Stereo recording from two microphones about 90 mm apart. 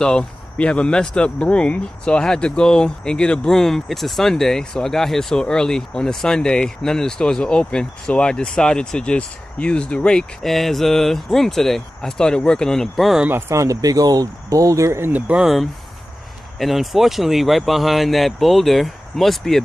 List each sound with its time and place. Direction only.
0.0 s speech: 10° left (ahead or behind)
13.3 s speech: 35° right (ahead or behind)
15.3 s speech: centre (ahead or behind)